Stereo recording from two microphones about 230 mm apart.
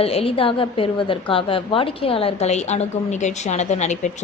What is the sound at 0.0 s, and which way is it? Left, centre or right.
A woman's voice, left.